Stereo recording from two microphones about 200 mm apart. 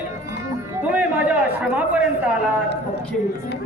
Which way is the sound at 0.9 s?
10° right (ahead or behind).